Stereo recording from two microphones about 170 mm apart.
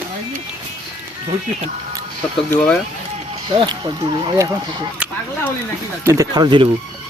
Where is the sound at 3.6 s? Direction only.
30° right (ahead or behind).